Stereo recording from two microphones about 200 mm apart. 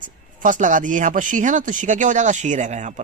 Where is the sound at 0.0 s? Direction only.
40° right (ahead or behind).